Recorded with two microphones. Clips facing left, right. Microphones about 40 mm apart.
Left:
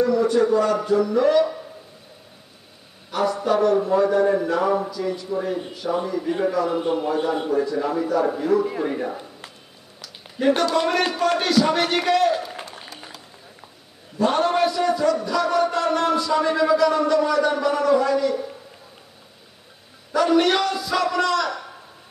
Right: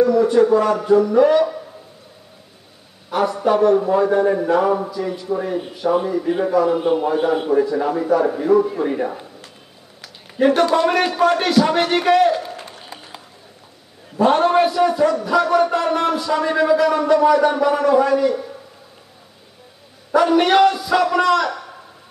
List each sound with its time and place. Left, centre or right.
0.0 s a man's voice: centre
3.1 s a man's voice: centre
10.4 s a man's voice: right
14.1 s speech: centre
20.2 s a man's voice: centre